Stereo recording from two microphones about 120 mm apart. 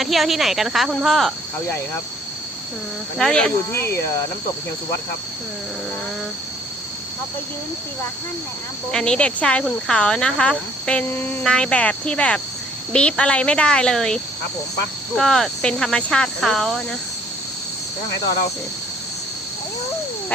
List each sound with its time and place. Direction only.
0.0 s speech: centre (ahead or behind)
3.2 s speech: 5° left (ahead or behind)
3.7 s speech: 20° left (ahead or behind)
8.9 s speech: 5° left (ahead or behind)